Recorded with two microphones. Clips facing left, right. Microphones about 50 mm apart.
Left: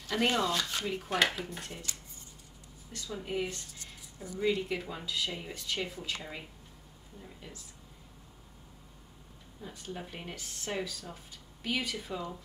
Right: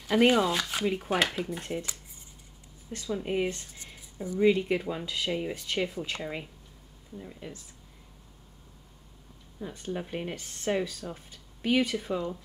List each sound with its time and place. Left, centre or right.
0.0 s speech: centre
1.7 s speech: right
7.2 s speech: centre
9.9 s speech: centre
12.1 s speech: centre